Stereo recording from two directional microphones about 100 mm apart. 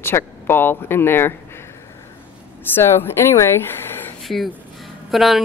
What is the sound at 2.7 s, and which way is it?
Speech, 25° left (ahead or behind).